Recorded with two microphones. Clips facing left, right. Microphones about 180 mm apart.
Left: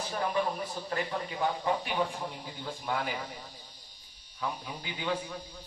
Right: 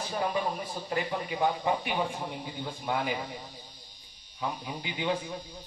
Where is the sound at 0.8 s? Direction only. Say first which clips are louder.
Right 3 dB; 15° right (ahead or behind).